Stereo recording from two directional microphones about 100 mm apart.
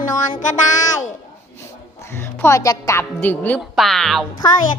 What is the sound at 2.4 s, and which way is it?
Speech, 35° left (ahead or behind).